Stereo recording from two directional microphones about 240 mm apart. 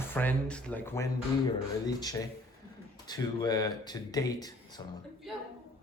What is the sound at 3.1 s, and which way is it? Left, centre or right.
Speech, centre.